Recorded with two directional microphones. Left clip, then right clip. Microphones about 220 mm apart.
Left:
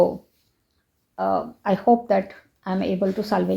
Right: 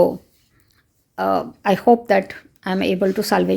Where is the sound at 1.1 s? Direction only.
45° right (ahead or behind).